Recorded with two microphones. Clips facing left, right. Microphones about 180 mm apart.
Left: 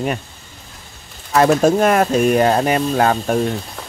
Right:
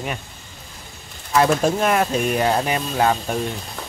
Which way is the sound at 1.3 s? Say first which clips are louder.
Left 4 dB; 45° left (ahead or behind).